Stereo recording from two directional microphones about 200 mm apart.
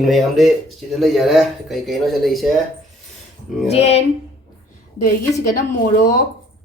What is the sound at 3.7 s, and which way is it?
Speech, 30° left (ahead or behind).